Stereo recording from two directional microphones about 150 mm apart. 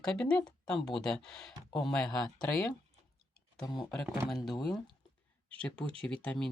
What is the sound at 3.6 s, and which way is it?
Speech, 25° left (ahead or behind).